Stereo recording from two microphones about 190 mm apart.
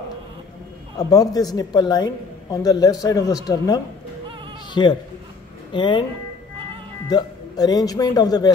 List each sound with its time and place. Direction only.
0.9 s a woman's voice: 20° left (ahead or behind)
7.1 s a woman's voice: 20° left (ahead or behind)